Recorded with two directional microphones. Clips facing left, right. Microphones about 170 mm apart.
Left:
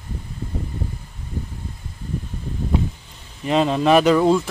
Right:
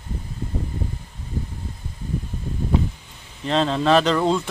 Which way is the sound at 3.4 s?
10° left (ahead or behind).